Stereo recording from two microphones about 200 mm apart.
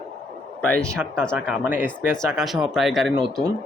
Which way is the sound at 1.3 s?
5° right (ahead or behind).